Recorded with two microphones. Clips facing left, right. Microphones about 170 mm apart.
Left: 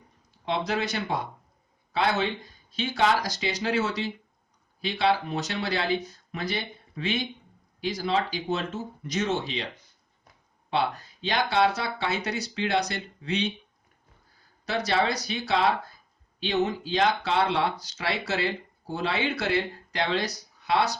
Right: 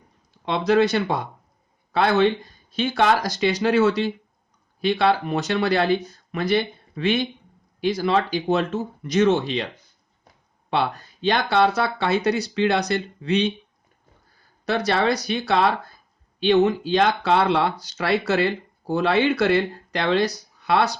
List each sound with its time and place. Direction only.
0.4 s speech: 65° right (ahead or behind)
10.7 s speech: 60° right (ahead or behind)
14.6 s speech: 60° right (ahead or behind)